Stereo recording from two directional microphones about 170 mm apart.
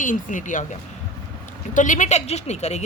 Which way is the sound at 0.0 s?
50° left (ahead or behind).